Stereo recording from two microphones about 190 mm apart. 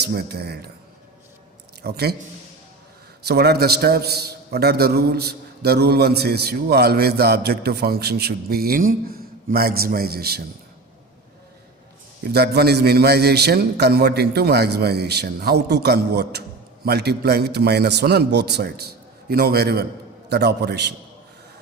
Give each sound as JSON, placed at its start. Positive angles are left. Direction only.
{"t": 0.0, "sound": "a man's voice", "side_deg": -60}
{"t": 1.8, "sound": "a man's voice", "side_deg": -55}
{"t": 3.2, "sound": "a man's voice", "side_deg": -60}
{"t": 12.2, "sound": "a man's voice", "side_deg": -60}